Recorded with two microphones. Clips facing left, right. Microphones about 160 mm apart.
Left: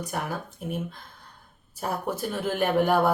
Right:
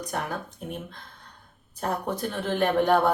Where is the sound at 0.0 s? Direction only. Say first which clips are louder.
Even; 5° left (ahead or behind).